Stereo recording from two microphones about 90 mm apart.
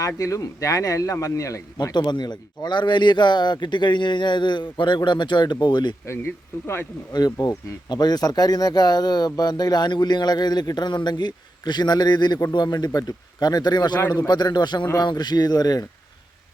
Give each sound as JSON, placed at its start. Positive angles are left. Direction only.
{"t": 0.2, "sound": "a man's voice", "side_deg": 35}
{"t": 1.9, "sound": "a man's voice", "side_deg": 55}
{"t": 7.1, "sound": "speech", "side_deg": 45}